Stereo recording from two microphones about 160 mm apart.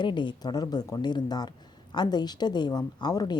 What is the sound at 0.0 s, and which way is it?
A woman's voice, 30° left (ahead or behind).